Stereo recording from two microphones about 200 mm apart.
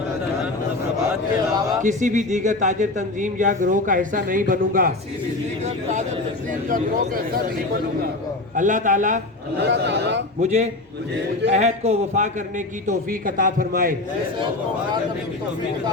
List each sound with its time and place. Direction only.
1.8 s speech: 40° right (ahead or behind)
6.7 s a man's voice: 45° right (ahead or behind)
8.5 s speech: 40° right (ahead or behind)
9.6 s a man's voice: 60° right (ahead or behind)
10.4 s a man's voice: 35° right (ahead or behind)